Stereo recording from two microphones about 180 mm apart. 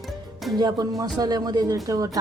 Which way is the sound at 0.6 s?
20° right (ahead or behind).